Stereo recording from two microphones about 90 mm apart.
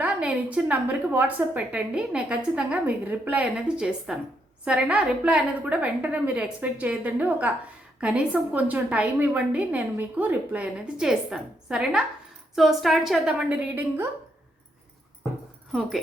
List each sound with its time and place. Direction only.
0.0 s a woman's voice: 15° right (ahead or behind)
13.5 s a woman's voice: 20° right (ahead or behind)